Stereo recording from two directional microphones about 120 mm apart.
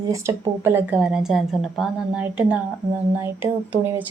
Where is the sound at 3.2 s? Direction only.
20° right (ahead or behind).